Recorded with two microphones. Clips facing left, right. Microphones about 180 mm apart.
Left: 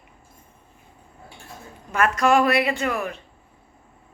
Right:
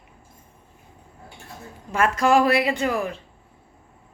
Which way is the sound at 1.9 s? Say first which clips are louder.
Even; 30° right (ahead or behind).